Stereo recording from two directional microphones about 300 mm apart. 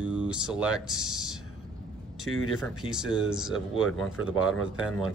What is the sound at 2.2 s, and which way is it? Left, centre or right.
Speech, left.